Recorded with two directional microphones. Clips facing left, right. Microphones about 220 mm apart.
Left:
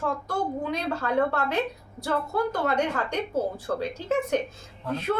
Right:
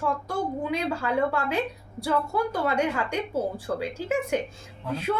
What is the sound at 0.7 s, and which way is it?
A woman's voice, 10° right (ahead or behind).